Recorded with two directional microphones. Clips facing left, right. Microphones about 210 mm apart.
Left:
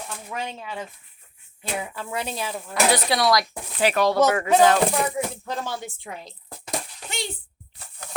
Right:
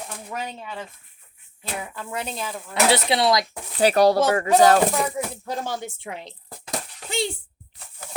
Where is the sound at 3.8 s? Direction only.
35° right (ahead or behind).